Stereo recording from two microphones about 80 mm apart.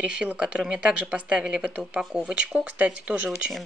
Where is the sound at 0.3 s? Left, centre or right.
Centre.